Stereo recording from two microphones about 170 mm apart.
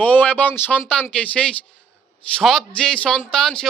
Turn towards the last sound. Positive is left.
turn(degrees=0)  # may be behind; listen again after turning